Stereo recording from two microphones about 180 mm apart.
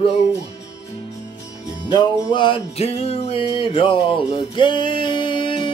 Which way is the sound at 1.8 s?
25° left (ahead or behind).